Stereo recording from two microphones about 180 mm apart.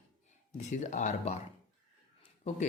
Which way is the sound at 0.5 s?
40° left (ahead or behind).